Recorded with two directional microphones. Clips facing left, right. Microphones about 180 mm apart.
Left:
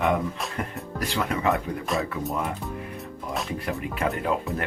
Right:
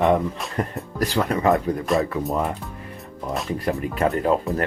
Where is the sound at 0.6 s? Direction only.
40° right (ahead or behind).